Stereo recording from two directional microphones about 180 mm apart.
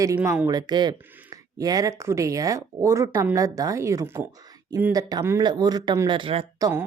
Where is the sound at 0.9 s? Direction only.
10° right (ahead or behind); by 6.7 s 30° right (ahead or behind).